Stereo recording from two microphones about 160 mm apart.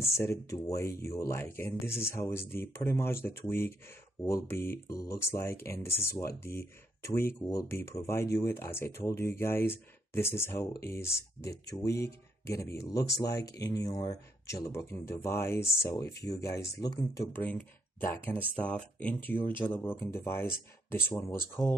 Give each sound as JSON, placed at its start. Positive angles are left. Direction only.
{"t": 0.3, "sound": "speech", "side_deg": 20}
{"t": 17.3, "sound": "speech", "side_deg": 10}